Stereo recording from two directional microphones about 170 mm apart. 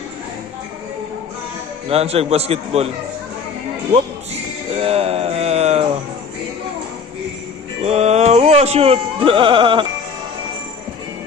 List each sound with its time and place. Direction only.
1.9 s a man's voice: 35° right (ahead or behind)
4.7 s a sound: 35° right (ahead or behind)
7.8 s music: 40° right (ahead or behind)